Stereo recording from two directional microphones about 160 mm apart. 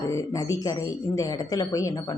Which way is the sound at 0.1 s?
20° left (ahead or behind).